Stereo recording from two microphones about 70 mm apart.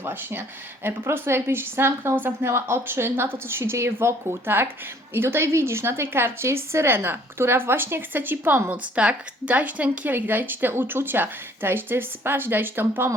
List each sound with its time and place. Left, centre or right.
0.0 s a woman's voice: right
9.0 s a woman's voice: centre